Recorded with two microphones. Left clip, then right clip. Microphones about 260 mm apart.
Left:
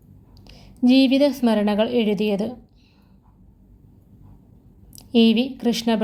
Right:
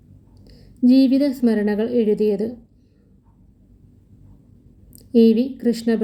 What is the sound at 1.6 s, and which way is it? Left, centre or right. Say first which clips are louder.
Speech: even; left.